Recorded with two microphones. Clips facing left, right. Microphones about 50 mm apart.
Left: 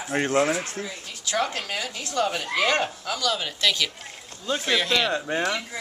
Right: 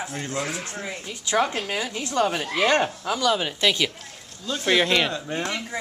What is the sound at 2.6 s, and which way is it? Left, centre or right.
Speech, right.